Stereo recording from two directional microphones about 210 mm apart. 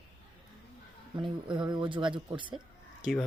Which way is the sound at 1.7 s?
25° right (ahead or behind).